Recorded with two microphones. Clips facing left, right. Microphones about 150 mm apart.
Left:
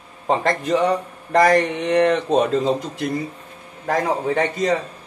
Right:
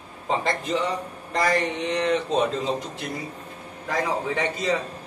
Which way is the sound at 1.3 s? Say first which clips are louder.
Left 8 dB; 55° left (ahead or behind).